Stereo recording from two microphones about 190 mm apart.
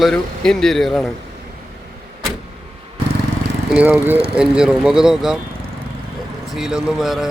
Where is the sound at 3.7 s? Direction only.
10° right (ahead or behind).